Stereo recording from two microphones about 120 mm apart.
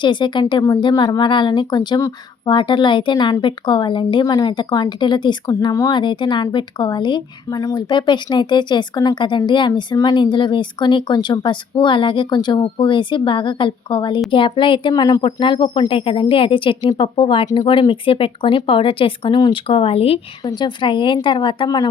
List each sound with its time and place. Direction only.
0.0 s speech: 40° left (ahead or behind)
5.9 s speech: 40° left (ahead or behind)
19.6 s speech: 50° left (ahead or behind)
20.4 s speech: 40° left (ahead or behind)